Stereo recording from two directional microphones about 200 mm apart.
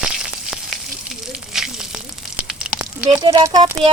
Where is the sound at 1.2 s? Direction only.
Centre (ahead or behind).